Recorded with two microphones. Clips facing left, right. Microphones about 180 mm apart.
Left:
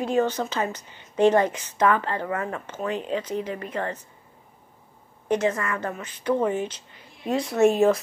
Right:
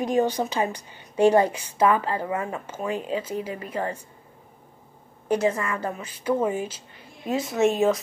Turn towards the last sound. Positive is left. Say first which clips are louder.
# left 2 dB
turn(degrees=0)  # may be behind; listen again after turning